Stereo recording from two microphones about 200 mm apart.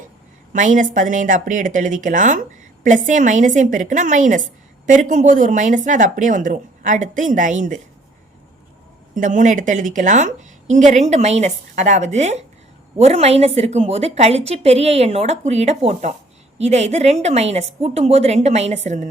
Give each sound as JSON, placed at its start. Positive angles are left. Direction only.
{"t": 0.5, "sound": "speech", "side_deg": -40}
{"t": 9.1, "sound": "speech", "side_deg": -40}